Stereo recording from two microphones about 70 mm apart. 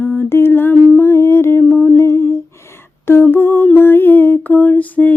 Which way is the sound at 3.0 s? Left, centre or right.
Left.